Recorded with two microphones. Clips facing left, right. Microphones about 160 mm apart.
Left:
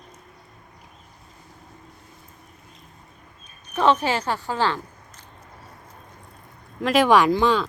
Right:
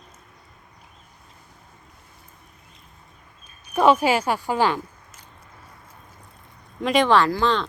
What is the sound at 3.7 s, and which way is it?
Speech, 10° right (ahead or behind).